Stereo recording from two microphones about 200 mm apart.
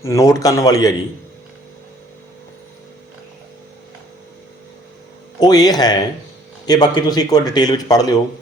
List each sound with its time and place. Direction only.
0.0 s a man's voice: 15° left (ahead or behind)
5.4 s speech: 20° left (ahead or behind)